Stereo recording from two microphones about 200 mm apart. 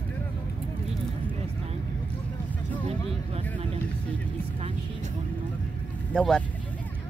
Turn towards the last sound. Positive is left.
turn(degrees=5)  # may be behind; listen again after turning